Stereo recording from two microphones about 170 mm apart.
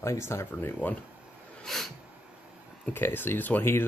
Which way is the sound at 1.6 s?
Centre (ahead or behind).